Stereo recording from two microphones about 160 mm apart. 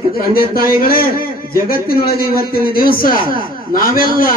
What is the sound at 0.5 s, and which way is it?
A man's voice, 65° left (ahead or behind).